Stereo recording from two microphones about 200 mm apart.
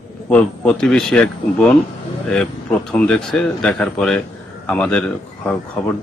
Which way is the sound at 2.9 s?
5° left (ahead or behind).